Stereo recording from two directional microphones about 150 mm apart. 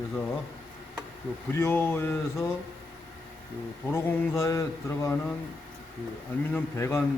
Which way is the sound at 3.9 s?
20° left (ahead or behind).